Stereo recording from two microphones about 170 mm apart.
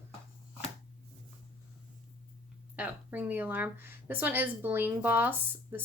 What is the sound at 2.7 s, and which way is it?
Speech, 10° right (ahead or behind).